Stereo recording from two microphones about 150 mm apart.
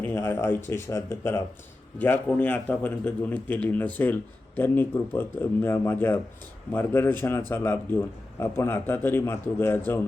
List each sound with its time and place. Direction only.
0.3 s speech: 15° left (ahead or behind)
2.4 s speech: 10° left (ahead or behind)